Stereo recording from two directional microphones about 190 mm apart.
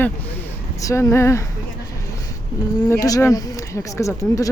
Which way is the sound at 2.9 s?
20° left (ahead or behind).